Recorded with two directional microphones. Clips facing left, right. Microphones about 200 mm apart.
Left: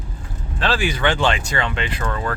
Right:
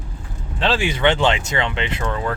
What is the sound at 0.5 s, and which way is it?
Speech, 25° right (ahead or behind).